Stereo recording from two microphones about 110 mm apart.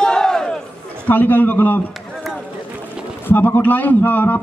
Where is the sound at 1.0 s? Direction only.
15° left (ahead or behind).